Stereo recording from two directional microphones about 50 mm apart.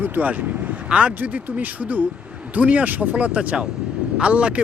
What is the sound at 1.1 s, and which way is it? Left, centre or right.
Speech, right.